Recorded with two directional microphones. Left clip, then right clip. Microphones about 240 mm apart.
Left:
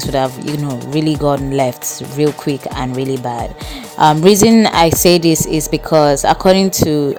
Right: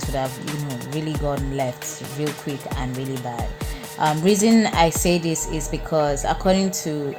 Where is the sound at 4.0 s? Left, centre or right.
Left.